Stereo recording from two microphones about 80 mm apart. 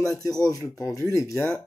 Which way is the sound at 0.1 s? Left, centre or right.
Left.